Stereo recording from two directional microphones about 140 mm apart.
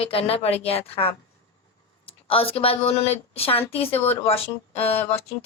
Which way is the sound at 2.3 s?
40° left (ahead or behind).